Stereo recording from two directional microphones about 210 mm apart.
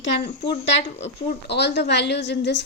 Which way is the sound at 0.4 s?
30° left (ahead or behind).